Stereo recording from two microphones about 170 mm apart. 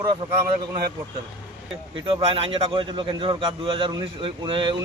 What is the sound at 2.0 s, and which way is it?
A man's voice, 35° right (ahead or behind).